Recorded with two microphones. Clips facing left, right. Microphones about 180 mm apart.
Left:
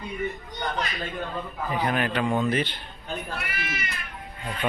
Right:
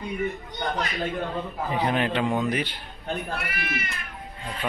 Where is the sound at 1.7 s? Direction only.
25° right (ahead or behind).